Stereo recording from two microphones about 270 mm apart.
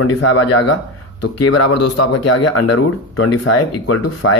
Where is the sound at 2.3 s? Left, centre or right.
Left.